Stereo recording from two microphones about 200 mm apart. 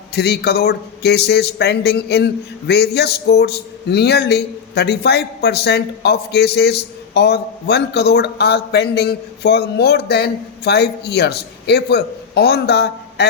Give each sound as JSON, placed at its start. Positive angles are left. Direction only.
{"t": 0.1, "sound": "a man's voice", "side_deg": 55}